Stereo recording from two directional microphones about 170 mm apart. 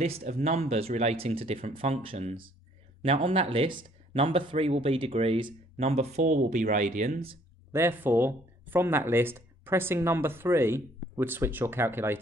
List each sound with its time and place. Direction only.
0.0 s speech: 40° right (ahead or behind)
7.7 s speech: 10° right (ahead or behind)